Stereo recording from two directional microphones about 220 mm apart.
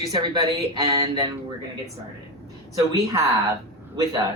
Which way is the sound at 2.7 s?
15° right (ahead or behind).